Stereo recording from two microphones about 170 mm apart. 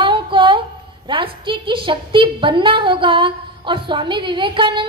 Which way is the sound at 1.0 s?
30° right (ahead or behind).